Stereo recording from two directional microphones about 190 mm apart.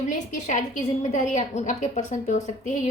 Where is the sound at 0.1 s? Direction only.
40° left (ahead or behind).